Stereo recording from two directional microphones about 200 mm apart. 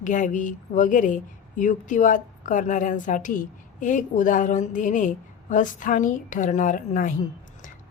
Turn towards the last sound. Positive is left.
turn(degrees=40)  # may be behind; listen again after turning